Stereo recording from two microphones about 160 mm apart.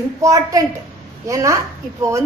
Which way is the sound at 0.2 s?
20° right (ahead or behind).